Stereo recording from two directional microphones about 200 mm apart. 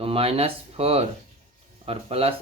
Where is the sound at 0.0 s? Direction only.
30° right (ahead or behind).